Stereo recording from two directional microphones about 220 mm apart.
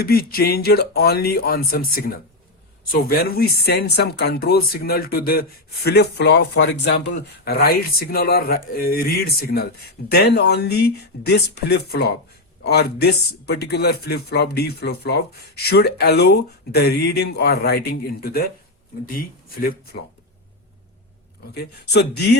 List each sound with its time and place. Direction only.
0.0 s speech: 45° left (ahead or behind)
21.5 s speech: 50° left (ahead or behind)